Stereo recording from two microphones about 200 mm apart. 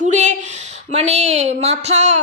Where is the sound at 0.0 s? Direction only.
35° right (ahead or behind).